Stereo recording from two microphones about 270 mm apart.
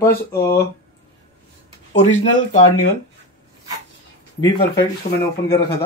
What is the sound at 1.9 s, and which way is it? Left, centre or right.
Speech, left.